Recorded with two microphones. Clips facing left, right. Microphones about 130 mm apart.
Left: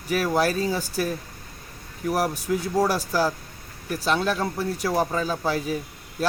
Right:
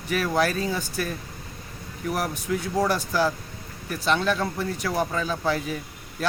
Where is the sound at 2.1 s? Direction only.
35° left (ahead or behind).